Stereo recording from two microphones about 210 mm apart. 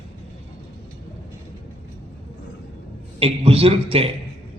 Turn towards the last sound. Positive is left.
turn(degrees=-25)  # may be behind; listen again after turning